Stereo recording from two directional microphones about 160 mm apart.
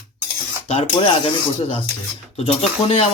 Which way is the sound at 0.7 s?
35° left (ahead or behind).